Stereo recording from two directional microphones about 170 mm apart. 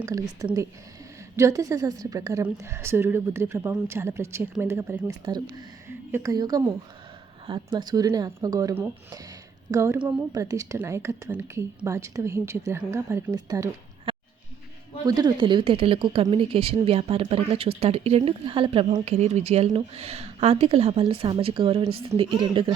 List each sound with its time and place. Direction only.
0.0 s speech: 20° right (ahead or behind)
1.4 s a woman's voice: 20° right (ahead or behind)
5.2 s a woman's voice: 25° right (ahead or behind)